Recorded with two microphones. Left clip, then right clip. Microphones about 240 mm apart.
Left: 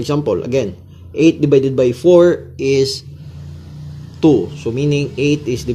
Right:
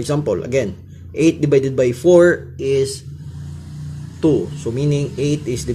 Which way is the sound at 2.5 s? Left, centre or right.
Centre.